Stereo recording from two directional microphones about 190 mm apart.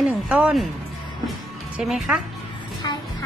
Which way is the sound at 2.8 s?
25° left (ahead or behind).